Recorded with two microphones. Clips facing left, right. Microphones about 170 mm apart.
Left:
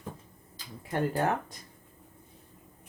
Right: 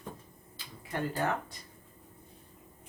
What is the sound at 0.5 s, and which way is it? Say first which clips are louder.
Speech: left 5 dB; 45° left (ahead or behind).